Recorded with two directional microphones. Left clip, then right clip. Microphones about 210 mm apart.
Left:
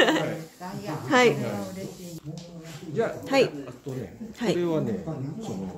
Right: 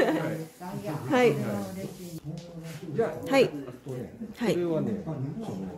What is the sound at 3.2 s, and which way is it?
Speech, centre (ahead or behind).